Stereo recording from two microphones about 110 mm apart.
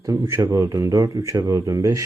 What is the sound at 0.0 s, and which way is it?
Speech, 30° right (ahead or behind).